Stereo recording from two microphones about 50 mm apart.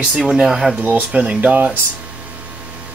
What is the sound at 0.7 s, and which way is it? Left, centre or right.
Speech, right.